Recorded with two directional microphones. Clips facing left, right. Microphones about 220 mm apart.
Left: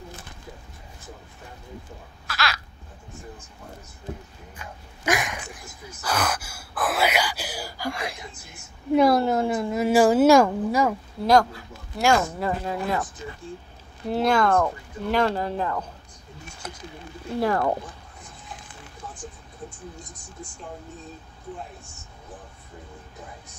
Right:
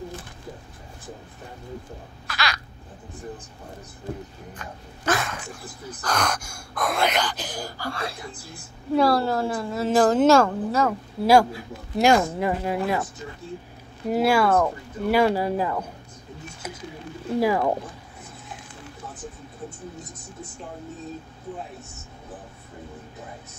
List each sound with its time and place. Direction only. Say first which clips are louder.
2.2 s a sound: even; centre (ahead or behind)
4.6 s dog: right 3 dB; 15° left (ahead or behind)
6.0 s a woman's voice: even; 5° left (ahead or behind)
11.2 s speech: right 2 dB; 10° right (ahead or behind)
16.6 s a sound: right 2 dB; 10° right (ahead or behind)
17.4 s speech: right 1 dB; 10° right (ahead or behind)